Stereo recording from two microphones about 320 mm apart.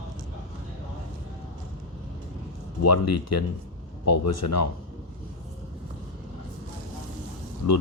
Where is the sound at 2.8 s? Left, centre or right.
Left.